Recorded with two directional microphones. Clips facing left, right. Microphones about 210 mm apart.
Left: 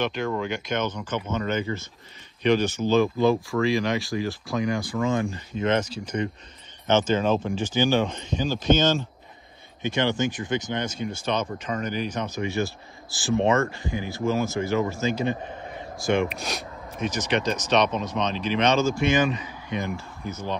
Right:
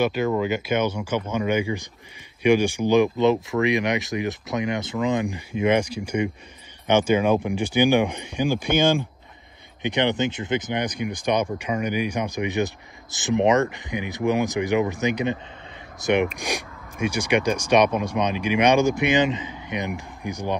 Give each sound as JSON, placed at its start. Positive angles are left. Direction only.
{"t": 0.0, "sound": "speech", "side_deg": -5}